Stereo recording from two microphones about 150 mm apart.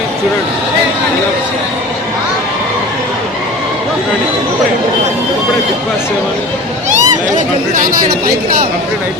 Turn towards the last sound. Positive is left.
turn(degrees=-60)  # may be behind; listen again after turning